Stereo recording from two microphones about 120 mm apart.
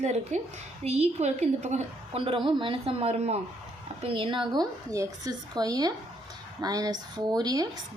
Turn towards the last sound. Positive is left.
turn(degrees=-35)  # may be behind; listen again after turning